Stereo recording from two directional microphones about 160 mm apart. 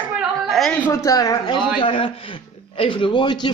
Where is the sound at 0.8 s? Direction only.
20° left (ahead or behind).